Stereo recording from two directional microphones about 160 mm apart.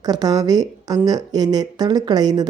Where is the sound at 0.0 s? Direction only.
25° right (ahead or behind).